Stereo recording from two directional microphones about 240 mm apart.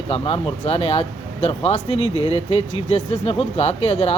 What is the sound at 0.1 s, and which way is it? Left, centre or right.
Speech, left.